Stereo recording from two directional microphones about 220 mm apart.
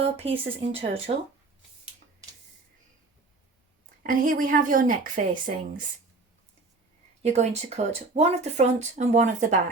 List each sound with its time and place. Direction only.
0.2 s speech: 25° right (ahead or behind)
4.0 s speech: 40° right (ahead or behind)
7.2 s speech: 30° right (ahead or behind)